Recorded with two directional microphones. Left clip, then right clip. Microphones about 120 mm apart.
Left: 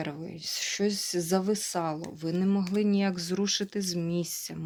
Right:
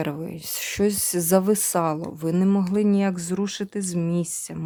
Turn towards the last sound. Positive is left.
turn(degrees=-40)  # may be behind; listen again after turning